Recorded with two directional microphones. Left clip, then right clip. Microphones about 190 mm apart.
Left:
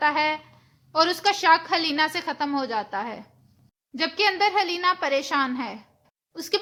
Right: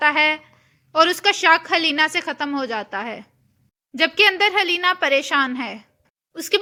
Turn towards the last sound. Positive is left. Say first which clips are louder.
# right 6 dB
turn(degrees=-20)  # may be behind; listen again after turning